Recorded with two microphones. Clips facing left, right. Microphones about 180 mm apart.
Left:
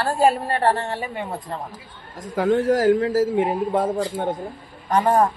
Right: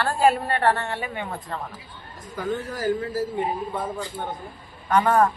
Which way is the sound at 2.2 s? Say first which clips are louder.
Left 9 dB; 90° left.